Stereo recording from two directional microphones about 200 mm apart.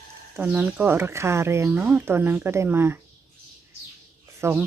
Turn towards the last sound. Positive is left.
turn(degrees=-10)  # may be behind; listen again after turning